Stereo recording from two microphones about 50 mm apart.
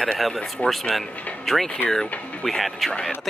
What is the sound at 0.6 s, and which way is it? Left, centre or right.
Speech, left.